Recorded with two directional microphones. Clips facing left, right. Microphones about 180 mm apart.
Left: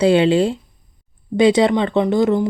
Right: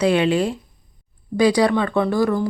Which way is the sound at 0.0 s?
30° left (ahead or behind).